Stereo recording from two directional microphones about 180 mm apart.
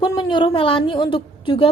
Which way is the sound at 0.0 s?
25° left (ahead or behind).